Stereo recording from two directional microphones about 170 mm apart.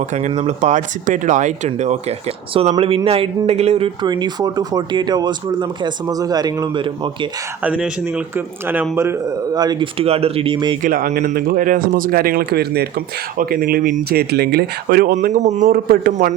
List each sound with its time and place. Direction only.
0.0 s speech: 40° right (ahead or behind)
4.0 s speech: 25° right (ahead or behind)
7.6 s speech: 5° right (ahead or behind); by 10.8 s 30° right (ahead or behind)
10.8 s speech: 60° right (ahead or behind)
13.3 s speech: 60° right (ahead or behind)
15.1 s speech: 45° right (ahead or behind)